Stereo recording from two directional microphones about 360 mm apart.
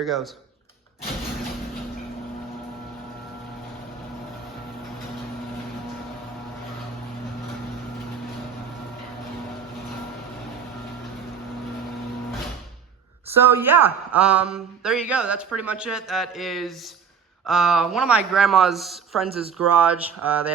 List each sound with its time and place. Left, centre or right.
0.0 s speech: centre
13.6 s speech: centre